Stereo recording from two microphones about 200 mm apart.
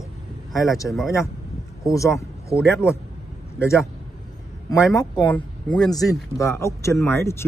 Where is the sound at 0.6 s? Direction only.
15° left (ahead or behind).